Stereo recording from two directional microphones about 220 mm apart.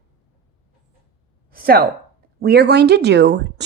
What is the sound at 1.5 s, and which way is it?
A woman's voice, 45° right (ahead or behind).